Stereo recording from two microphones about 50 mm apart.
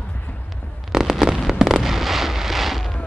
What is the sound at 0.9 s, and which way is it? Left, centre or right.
Fireworks, centre.